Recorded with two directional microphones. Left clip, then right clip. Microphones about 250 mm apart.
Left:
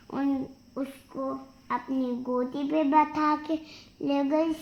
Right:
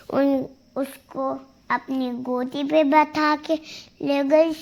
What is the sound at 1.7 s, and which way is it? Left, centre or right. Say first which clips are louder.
A child's voice: right 5 dB; right.